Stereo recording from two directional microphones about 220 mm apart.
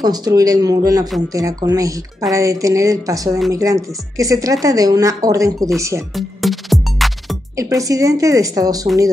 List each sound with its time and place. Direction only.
0.0 s a woman's voice: 15° right (ahead or behind)
6.1 s music: centre (ahead or behind)
7.5 s a woman's voice: 15° right (ahead or behind)